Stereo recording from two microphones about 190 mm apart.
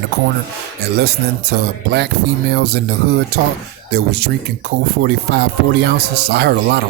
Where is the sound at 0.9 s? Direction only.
60° right (ahead or behind).